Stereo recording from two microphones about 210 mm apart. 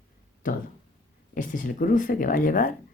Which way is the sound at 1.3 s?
40° left (ahead or behind).